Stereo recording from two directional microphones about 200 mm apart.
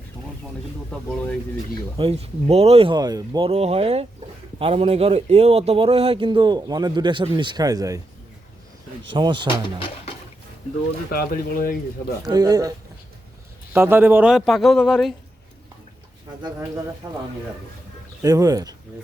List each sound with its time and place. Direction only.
0.9 s a man's voice: 5° left (ahead or behind)
2.0 s speech: 30° right (ahead or behind)
3.5 s speech: 30° right (ahead or behind)
9.1 s speech: 25° right (ahead or behind)
11.1 s speech: 50° left (ahead or behind)
12.2 s speech: 20° right (ahead or behind)
13.7 s a man's voice: 10° right (ahead or behind)
16.4 s speech: 15° right (ahead or behind)